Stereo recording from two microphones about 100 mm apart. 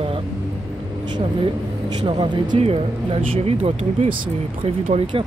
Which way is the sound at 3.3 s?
80° right.